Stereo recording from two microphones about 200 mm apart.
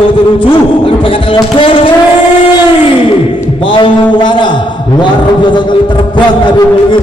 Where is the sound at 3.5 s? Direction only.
25° left (ahead or behind).